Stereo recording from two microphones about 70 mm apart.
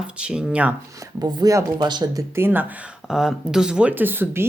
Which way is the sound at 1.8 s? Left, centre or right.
Right.